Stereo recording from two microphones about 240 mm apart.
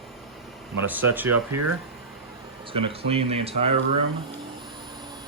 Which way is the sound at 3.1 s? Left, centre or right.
Right.